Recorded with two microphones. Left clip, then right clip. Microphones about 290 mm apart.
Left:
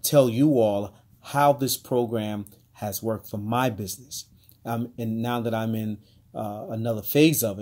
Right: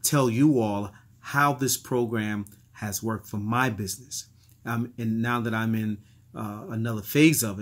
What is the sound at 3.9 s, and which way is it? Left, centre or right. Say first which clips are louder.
Speech: right 1 dB; centre.